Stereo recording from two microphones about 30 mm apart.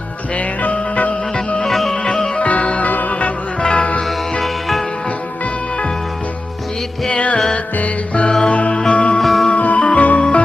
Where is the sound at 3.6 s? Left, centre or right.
Left.